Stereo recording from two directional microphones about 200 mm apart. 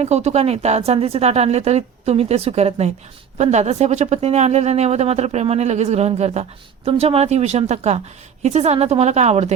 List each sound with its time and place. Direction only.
0.0 s speech: 35° right (ahead or behind)